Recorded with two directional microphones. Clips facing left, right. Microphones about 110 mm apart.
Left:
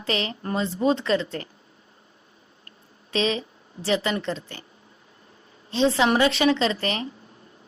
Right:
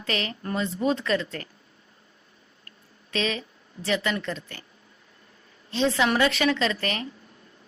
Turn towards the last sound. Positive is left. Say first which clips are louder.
# left 2 dB
turn(degrees=30)  # may be behind; listen again after turning